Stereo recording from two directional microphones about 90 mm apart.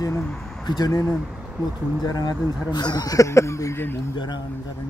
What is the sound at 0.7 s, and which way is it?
Speech, 45° left (ahead or behind).